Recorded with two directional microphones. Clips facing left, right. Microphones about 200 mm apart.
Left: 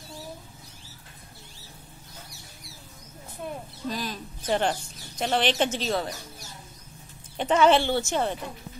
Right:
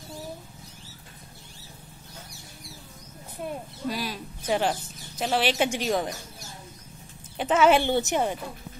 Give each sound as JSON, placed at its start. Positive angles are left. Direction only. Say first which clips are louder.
{"t": 3.9, "sound": "speech", "louder": "right 1 dB", "side_deg": -10}
{"t": 7.3, "sound": "speech", "louder": "even", "side_deg": -5}
{"t": 7.8, "sound": "speech", "louder": "right 1 dB", "side_deg": -15}